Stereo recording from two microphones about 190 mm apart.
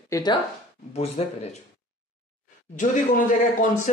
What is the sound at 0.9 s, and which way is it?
Speech, 35° left (ahead or behind).